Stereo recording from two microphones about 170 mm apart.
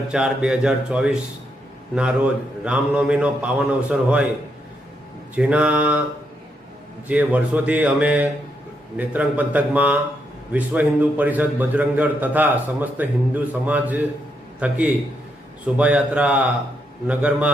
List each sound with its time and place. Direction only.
0.1 s speech: 5° right (ahead or behind)
2.6 s a man's voice: 5° right (ahead or behind)
5.3 s a man's voice: 5° right (ahead or behind)
7.1 s a man's voice: 10° right (ahead or behind)